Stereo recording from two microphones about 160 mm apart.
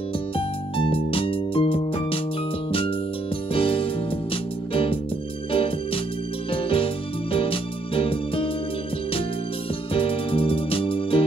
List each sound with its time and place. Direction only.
0.4 s music: 35° left (ahead or behind)
3.5 s music: 35° left (ahead or behind)
6.5 s music: 35° left (ahead or behind)
9.9 s music: 35° left (ahead or behind)